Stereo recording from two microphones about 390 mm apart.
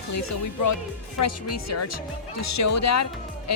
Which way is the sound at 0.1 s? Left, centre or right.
Left.